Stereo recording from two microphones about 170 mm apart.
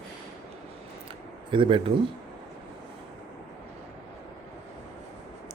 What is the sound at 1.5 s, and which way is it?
Speech, 30° right (ahead or behind).